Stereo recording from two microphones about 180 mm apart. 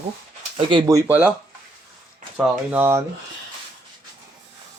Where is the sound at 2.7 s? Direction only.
10° right (ahead or behind).